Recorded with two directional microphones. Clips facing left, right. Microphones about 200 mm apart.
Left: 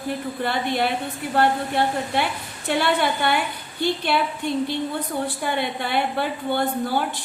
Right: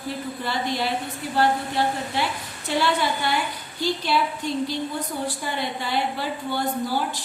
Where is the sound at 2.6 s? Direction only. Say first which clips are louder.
Left 2 dB; 55° left (ahead or behind).